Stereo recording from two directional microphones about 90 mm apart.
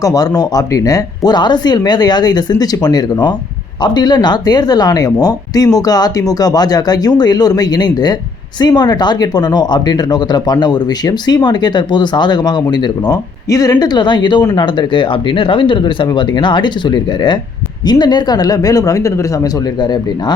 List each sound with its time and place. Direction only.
0.0 s speech: 45° left (ahead or behind)
19.8 s speech: 55° left (ahead or behind)